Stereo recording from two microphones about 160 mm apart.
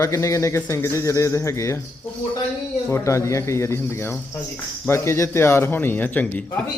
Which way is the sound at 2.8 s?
15° left (ahead or behind).